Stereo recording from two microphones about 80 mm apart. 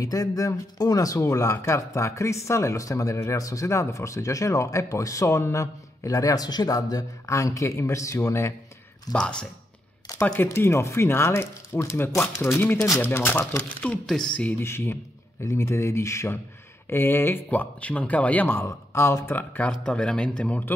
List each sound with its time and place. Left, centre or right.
0.0 s speech: left
9.1 s speech: centre
10.5 s speech: left
14.0 s speech: centre
14.6 s speech: left; by 20.6 s centre